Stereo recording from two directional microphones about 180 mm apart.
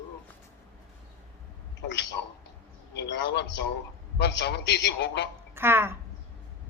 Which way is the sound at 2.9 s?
75° left (ahead or behind).